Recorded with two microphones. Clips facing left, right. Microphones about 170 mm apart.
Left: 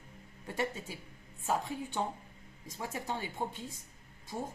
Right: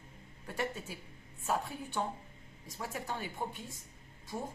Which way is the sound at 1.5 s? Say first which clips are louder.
Left 1 dB; 20° left (ahead or behind).